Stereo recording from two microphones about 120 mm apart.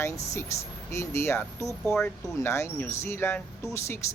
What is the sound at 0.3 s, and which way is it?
Speech, 25° left (ahead or behind).